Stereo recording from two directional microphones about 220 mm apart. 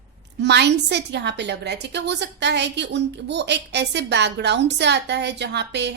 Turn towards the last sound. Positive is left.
turn(degrees=-50)  # may be behind; listen again after turning